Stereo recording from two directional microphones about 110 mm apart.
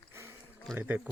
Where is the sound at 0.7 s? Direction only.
20° right (ahead or behind).